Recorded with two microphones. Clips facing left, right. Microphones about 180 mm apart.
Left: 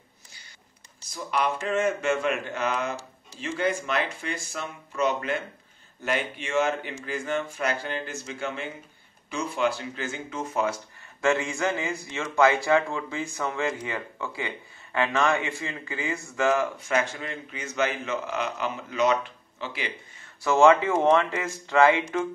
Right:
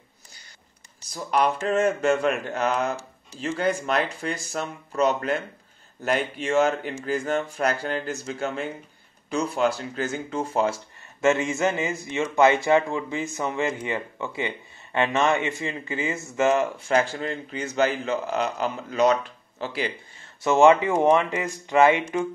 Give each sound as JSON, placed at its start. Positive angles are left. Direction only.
{"t": 1.1, "sound": "speech", "side_deg": -40}
{"t": 20.4, "sound": "speech", "side_deg": -20}